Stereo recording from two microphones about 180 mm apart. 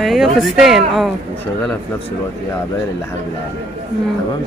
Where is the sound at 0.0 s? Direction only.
Centre (ahead or behind).